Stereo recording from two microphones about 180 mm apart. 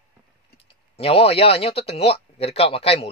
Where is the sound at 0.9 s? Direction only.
30° left (ahead or behind).